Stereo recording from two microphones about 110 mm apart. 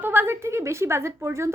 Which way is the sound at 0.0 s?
20° right (ahead or behind).